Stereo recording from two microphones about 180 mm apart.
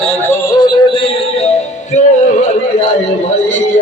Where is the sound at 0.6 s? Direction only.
30° left (ahead or behind).